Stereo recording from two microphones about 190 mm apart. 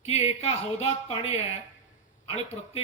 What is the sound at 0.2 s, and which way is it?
A man's voice, 30° left (ahead or behind).